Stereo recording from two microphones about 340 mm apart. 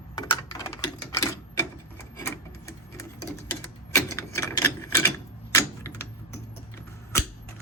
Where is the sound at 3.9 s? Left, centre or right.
Centre.